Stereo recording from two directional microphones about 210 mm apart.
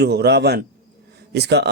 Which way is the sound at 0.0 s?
50° right (ahead or behind).